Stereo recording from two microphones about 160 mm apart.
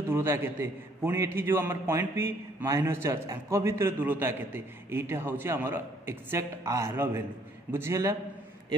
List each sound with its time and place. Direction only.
0.1 s a man's voice: 15° right (ahead or behind)